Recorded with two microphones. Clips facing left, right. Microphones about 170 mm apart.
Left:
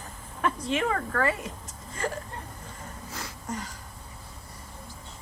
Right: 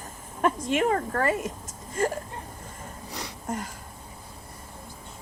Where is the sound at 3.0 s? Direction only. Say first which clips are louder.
Right 3 dB; 20° right (ahead or behind).